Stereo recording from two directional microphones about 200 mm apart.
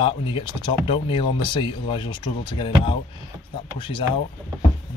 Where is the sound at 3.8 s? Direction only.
25° left (ahead or behind).